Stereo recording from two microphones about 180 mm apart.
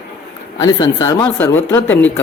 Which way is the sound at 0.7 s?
20° left (ahead or behind).